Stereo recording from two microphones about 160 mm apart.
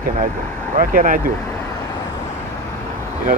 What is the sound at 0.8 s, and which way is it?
Speech, 60° right (ahead or behind).